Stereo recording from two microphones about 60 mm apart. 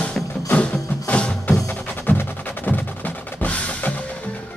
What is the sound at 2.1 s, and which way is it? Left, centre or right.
Percussion, left.